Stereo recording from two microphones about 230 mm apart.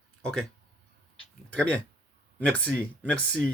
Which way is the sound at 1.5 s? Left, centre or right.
Centre.